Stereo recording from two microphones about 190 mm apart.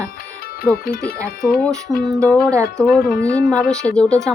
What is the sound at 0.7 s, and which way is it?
Speech, 50° left (ahead or behind).